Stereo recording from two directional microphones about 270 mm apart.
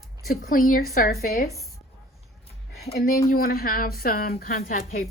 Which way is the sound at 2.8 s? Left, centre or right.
Left.